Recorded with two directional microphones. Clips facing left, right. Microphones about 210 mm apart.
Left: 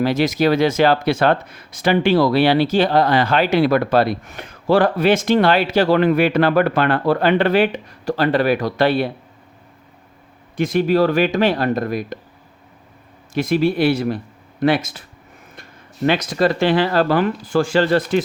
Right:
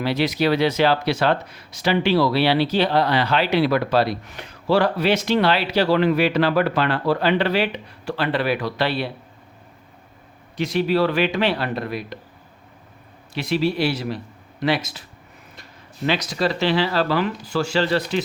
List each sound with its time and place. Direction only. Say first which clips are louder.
0.0 s speech: left 4 dB; 45° left (ahead or behind)
10.6 s speech: left 4 dB; 50° left (ahead or behind)
13.3 s speech: left 4 dB; 50° left (ahead or behind)
16.0 s speech: left 5 dB; 50° left (ahead or behind)